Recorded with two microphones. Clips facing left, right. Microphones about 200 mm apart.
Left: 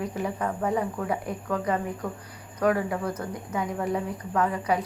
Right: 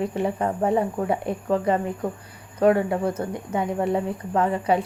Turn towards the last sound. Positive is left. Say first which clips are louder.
# right 4 dB
turn(degrees=-25)  # may be behind; listen again after turning